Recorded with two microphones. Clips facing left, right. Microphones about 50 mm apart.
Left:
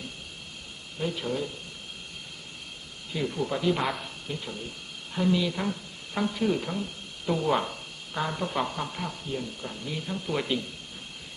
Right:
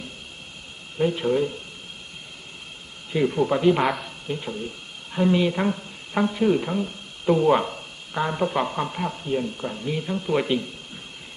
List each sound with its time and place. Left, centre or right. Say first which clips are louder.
0.9 s speech: right 9 dB; right
3.1 s speech: right 8 dB; right
3.8 s speech: right 6 dB; centre
4.3 s speech: right 7 dB; right
6.2 s speech: right 5 dB; centre